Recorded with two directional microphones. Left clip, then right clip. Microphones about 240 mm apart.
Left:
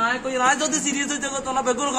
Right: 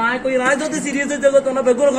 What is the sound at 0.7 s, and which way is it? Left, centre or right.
Speech, left.